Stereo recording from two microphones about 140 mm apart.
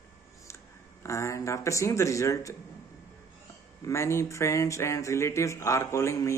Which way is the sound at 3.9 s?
20° left (ahead or behind).